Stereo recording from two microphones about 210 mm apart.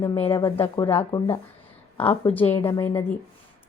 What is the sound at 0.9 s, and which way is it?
A woman's voice, 10° left (ahead or behind).